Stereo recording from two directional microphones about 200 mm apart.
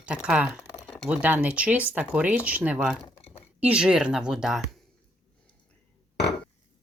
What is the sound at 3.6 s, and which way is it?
Speech, 5° right (ahead or behind).